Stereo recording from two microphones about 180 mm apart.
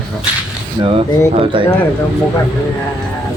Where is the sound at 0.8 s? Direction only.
30° right (ahead or behind).